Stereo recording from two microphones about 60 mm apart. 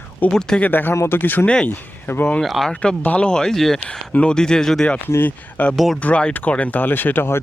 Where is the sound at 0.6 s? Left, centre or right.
Left.